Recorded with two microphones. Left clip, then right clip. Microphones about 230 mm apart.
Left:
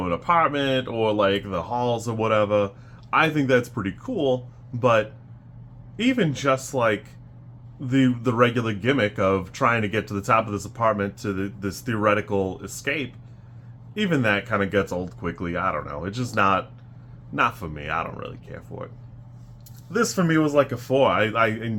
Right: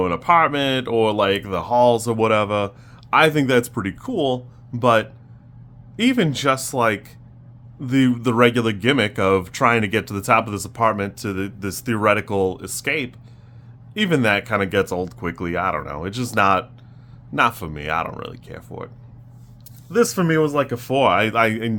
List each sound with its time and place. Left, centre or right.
0.0 s speech: right
19.9 s speech: right